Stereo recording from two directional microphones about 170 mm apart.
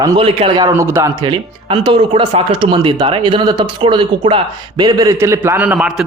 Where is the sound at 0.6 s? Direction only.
15° right (ahead or behind).